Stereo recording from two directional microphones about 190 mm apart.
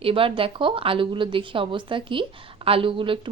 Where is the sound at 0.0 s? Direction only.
30° right (ahead or behind).